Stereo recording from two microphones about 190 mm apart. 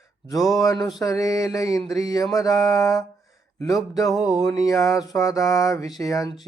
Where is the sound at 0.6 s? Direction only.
20° left (ahead or behind).